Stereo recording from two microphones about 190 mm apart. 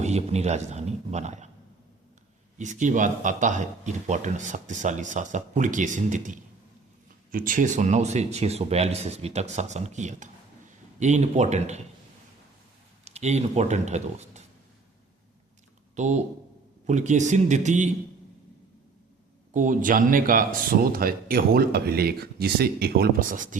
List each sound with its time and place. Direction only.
0.0 s a man's voice: 35° right (ahead or behind)
2.6 s speech: 40° right (ahead or behind)
13.1 s speech: 35° right (ahead or behind)
16.0 s speech: 40° right (ahead or behind)
19.5 s speech: 45° right (ahead or behind)